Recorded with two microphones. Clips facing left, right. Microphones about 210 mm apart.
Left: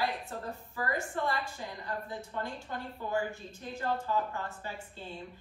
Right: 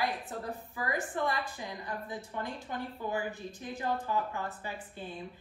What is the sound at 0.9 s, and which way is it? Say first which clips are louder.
A woman's voice: right 2 dB; 20° right (ahead or behind).